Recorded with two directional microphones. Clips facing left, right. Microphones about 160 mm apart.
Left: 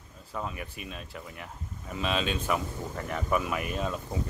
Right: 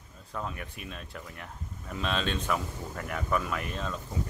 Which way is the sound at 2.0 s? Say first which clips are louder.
Left 1 dB; 5° left (ahead or behind).